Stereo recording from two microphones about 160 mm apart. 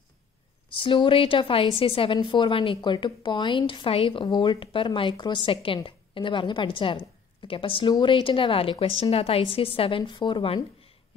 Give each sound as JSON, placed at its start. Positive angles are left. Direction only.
{"t": 0.7, "sound": "a woman's voice", "side_deg": 35}